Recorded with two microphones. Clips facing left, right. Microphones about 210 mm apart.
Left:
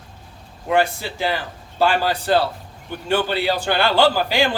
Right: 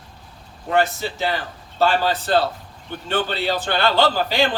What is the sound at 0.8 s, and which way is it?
A man's voice, 10° left (ahead or behind).